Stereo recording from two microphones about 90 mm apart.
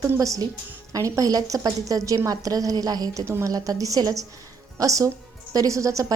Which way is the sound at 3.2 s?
30° right (ahead or behind).